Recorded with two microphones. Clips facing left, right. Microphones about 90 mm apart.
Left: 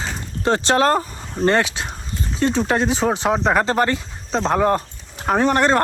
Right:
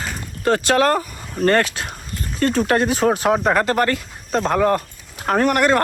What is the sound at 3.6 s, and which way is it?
Speech, 25° left (ahead or behind).